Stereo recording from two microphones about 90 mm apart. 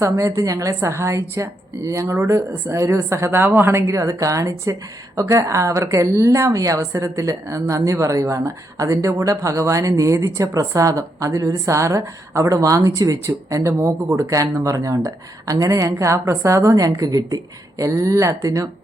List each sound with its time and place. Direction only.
0.0 s a woman's voice: 35° right (ahead or behind)
3.8 s a woman's voice: 35° right (ahead or behind)